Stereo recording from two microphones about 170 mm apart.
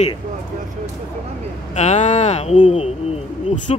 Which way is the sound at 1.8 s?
40° left (ahead or behind).